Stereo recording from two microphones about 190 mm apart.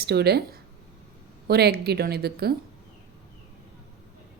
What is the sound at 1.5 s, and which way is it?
Speech, 55° right (ahead or behind).